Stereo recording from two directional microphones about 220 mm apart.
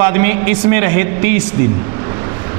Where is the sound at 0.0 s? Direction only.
15° right (ahead or behind).